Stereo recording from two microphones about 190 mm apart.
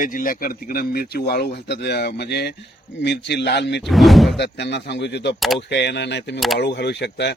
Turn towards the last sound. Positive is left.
turn(degrees=65)  # may be behind; listen again after turning